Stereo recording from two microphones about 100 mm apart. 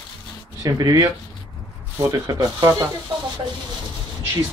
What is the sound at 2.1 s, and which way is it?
Speech, 35° right (ahead or behind).